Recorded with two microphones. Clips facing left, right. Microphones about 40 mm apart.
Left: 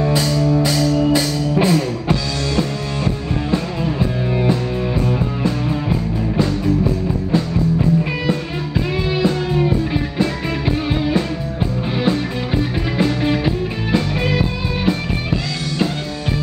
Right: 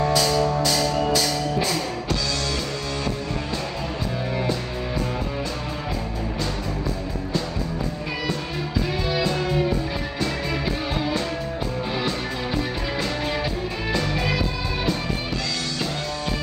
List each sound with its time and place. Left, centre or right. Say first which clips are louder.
1.1 s music: left 5 dB; left
12.9 s music: left 9 dB; left